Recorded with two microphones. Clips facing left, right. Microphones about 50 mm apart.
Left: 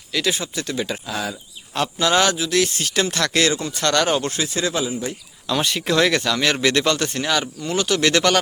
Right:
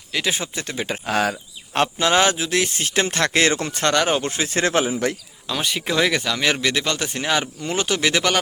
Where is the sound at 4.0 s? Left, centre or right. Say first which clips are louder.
Left 2 dB; centre.